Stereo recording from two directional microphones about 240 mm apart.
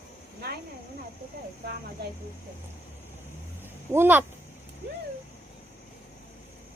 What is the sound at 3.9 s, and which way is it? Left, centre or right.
Speech, centre.